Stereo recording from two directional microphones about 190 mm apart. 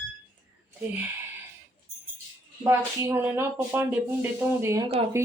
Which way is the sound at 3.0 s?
10° right (ahead or behind).